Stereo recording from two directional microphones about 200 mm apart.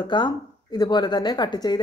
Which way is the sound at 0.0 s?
20° left (ahead or behind).